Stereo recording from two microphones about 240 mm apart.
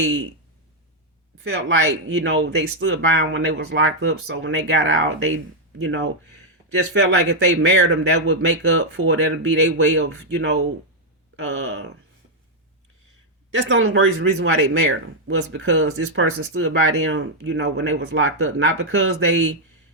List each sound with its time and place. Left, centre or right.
0.0 s speech: right
2.0 s speech: right
13.6 s speech: right